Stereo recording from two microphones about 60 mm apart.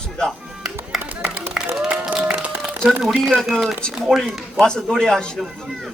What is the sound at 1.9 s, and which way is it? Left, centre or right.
Applause, right.